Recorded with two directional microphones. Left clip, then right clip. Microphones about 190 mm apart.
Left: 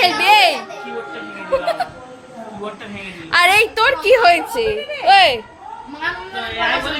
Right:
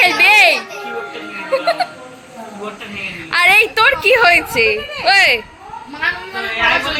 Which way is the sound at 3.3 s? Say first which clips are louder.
Right 2 dB; 5° left (ahead or behind).